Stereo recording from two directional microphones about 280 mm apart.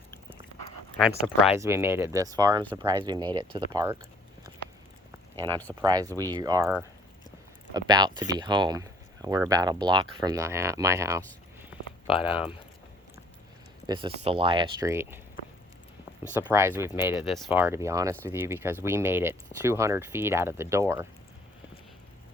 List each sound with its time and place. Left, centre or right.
1.5 s speech: centre
5.8 s speech: centre
12.2 s speech: centre
13.8 s speech: centre
16.5 s speech: centre